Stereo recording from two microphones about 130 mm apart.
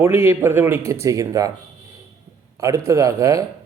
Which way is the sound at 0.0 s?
20° right (ahead or behind).